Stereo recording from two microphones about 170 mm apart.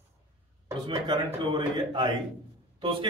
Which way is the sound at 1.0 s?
30° right (ahead or behind).